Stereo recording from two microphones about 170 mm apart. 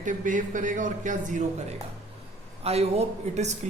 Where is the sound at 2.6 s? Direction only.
35° right (ahead or behind).